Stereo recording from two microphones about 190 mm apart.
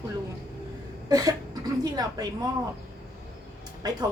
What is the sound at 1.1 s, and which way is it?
A woman's voice, 20° right (ahead or behind).